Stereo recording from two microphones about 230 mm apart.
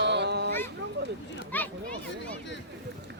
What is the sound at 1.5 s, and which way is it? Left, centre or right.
Speech, centre.